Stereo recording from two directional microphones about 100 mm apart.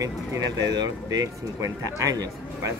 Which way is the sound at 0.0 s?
35° right (ahead or behind).